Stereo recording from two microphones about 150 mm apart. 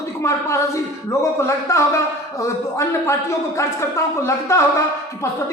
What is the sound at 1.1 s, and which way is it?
A man's voice, 20° left (ahead or behind).